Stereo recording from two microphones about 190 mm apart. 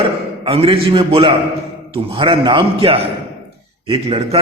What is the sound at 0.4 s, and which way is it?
A man's voice, 30° right (ahead or behind).